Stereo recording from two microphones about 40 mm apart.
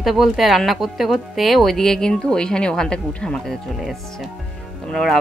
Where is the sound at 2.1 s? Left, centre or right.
Left.